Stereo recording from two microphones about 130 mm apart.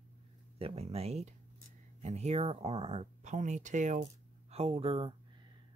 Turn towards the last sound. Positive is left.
turn(degrees=-45)  # may be behind; listen again after turning